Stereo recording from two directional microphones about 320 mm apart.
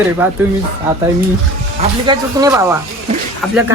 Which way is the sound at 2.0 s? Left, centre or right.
Centre.